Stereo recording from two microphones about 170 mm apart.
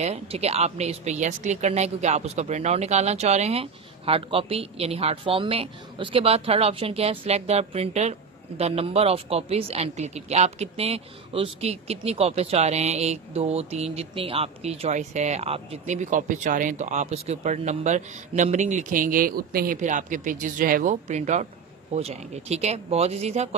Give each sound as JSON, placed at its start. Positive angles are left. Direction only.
{"t": 0.0, "sound": "speech", "side_deg": -40}